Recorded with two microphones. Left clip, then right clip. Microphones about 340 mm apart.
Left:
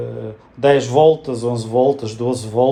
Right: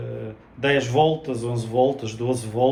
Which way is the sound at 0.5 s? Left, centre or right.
Centre.